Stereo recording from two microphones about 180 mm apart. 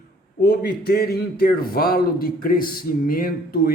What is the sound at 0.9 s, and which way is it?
A man's voice, 60° left (ahead or behind).